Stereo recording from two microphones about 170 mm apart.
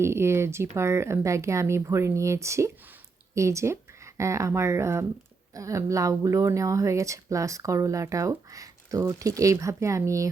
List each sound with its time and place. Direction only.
0.0 s speech: 15° right (ahead or behind)